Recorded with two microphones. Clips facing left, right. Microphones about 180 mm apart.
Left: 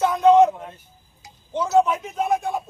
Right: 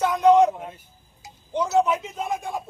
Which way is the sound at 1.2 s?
15° right (ahead or behind).